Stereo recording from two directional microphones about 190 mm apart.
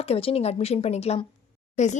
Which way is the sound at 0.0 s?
30° left (ahead or behind).